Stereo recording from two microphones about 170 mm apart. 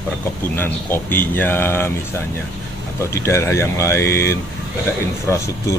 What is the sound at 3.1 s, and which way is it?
Speech, 15° left (ahead or behind).